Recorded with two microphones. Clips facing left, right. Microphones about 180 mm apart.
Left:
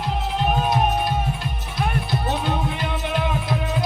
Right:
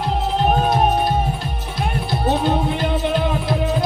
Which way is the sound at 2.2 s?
30° right (ahead or behind).